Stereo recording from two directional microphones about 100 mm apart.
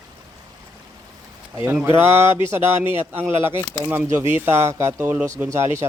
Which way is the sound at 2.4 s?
25° right (ahead or behind).